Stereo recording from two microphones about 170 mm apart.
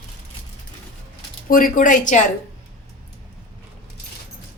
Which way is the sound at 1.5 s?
55° left (ahead or behind).